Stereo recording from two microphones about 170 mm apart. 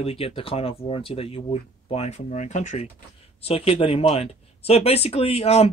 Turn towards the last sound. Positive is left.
turn(degrees=35)  # may be behind; listen again after turning